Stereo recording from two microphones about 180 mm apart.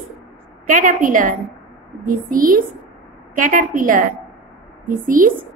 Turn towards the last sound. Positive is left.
turn(degrees=-50)  # may be behind; listen again after turning